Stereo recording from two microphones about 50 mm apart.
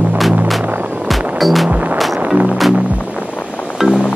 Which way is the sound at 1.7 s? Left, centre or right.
Right.